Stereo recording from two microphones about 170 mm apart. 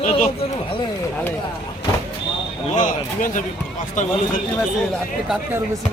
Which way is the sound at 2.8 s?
50° left (ahead or behind).